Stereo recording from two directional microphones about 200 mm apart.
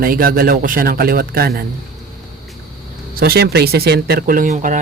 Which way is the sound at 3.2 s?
50° right (ahead or behind).